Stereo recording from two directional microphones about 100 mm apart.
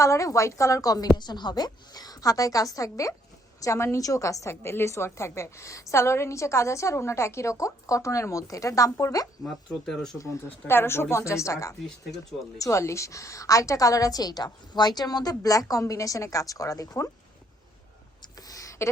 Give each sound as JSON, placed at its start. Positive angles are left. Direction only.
{"t": 0.0, "sound": "a woman's voice", "side_deg": 30}
{"t": 9.4, "sound": "speech", "side_deg": 5}
{"t": 10.2, "sound": "a woman's voice", "side_deg": 25}
{"t": 18.2, "sound": "a sound", "side_deg": 40}